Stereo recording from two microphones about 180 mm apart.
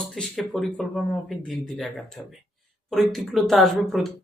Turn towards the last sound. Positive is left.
turn(degrees=0)  # may be behind; listen again after turning